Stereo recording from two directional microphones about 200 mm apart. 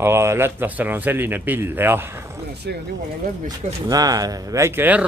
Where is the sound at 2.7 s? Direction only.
55° right (ahead or behind).